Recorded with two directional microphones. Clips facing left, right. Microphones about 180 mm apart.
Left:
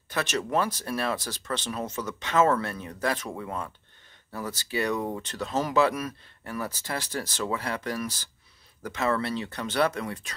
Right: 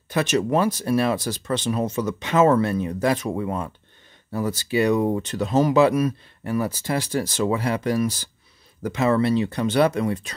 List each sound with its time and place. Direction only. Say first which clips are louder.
0.1 s speech: right 7 dB; 15° right (ahead or behind)